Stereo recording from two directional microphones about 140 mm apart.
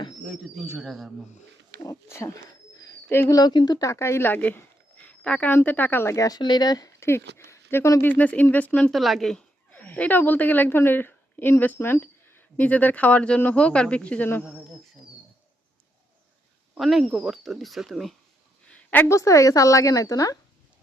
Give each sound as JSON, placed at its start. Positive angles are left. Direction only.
{"t": 0.3, "sound": "speech", "side_deg": 0}
{"t": 1.8, "sound": "speech", "side_deg": 20}
{"t": 9.0, "sound": "a woman's voice", "side_deg": 0}
{"t": 14.4, "sound": "speech", "side_deg": -5}
{"t": 16.7, "sound": "speech", "side_deg": 0}
{"t": 18.7, "sound": "a woman's voice", "side_deg": 10}